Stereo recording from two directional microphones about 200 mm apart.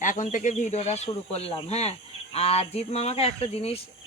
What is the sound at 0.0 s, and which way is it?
Speech, 40° left (ahead or behind).